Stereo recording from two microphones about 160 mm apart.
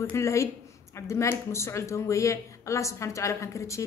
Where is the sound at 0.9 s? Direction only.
20° left (ahead or behind).